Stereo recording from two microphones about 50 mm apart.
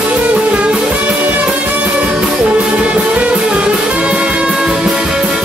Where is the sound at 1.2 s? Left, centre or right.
Right.